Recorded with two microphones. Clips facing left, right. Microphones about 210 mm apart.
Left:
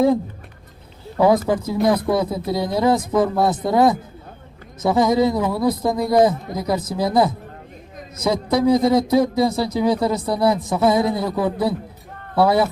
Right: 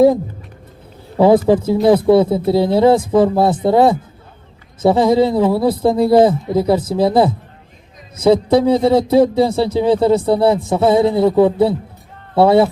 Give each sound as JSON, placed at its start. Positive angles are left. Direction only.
{"t": 1.2, "sound": "a man's voice", "side_deg": -30}